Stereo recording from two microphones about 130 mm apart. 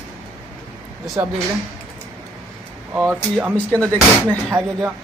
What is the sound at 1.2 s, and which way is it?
Speech, 15° right (ahead or behind).